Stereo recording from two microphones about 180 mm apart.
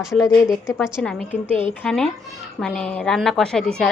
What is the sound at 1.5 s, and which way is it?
Speech, 30° right (ahead or behind).